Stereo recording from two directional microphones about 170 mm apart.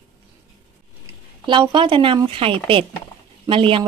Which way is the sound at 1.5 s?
30° right (ahead or behind).